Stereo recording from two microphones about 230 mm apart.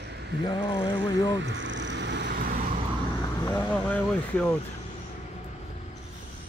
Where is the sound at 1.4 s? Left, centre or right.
Right.